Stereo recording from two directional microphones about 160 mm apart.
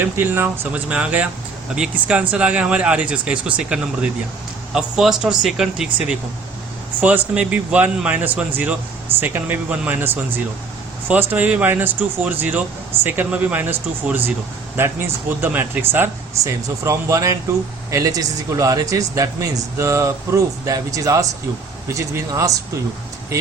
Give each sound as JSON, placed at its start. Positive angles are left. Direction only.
{"t": 0.0, "sound": "speech", "side_deg": -15}